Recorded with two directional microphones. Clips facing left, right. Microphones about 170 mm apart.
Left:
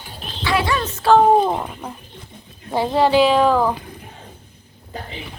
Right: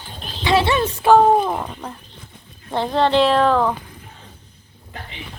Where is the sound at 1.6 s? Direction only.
5° left (ahead or behind).